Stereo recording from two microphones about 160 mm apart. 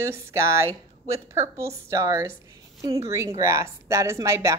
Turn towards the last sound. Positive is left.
turn(degrees=-20)  # may be behind; listen again after turning